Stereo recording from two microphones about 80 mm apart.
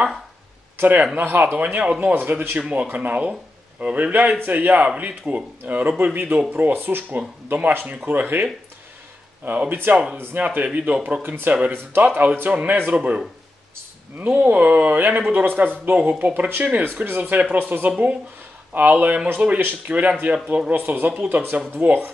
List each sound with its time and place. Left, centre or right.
0.7 s speech: right
2.1 s speech: right
9.7 s speech: right
14.2 s speech: centre
17.2 s speech: centre